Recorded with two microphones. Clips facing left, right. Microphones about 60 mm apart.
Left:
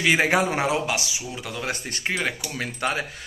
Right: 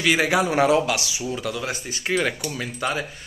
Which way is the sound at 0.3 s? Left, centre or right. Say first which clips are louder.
Right 1 dB; left.